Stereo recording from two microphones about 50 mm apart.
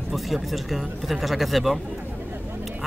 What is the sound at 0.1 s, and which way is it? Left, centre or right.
Speech, centre.